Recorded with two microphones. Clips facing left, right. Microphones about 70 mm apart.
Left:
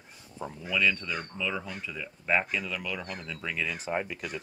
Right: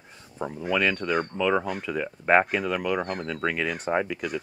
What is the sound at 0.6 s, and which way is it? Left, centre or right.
Speech, right.